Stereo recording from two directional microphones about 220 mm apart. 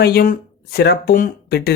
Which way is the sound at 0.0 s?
45° left (ahead or behind).